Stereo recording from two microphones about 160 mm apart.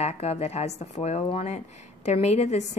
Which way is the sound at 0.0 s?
40° left (ahead or behind).